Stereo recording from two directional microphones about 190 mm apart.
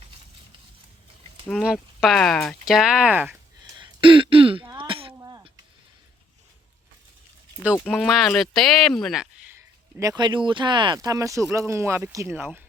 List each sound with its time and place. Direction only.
1.5 s speech: centre (ahead or behind)
3.6 s throat clearing: 25° right (ahead or behind)
4.8 s a sound: 30° right (ahead or behind)
7.9 s speech: centre (ahead or behind)
10.0 s speech: 20° right (ahead or behind)